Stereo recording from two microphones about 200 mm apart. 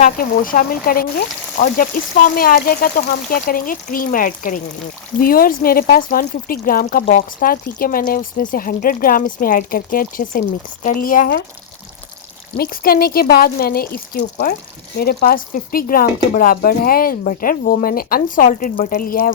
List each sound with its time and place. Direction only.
0.0 s speech: 45° left (ahead or behind)
12.5 s speech: 50° left (ahead or behind)